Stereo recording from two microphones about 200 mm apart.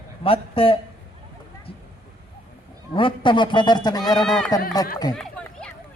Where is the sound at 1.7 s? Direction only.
30° left (ahead or behind).